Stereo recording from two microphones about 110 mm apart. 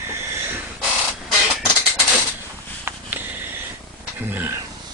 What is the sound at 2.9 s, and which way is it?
Sniff, 20° right (ahead or behind).